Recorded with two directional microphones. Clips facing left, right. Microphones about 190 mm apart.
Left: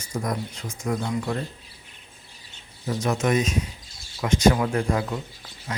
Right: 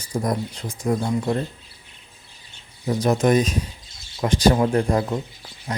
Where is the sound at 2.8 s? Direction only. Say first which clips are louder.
Right 5 dB; 35° right (ahead or behind).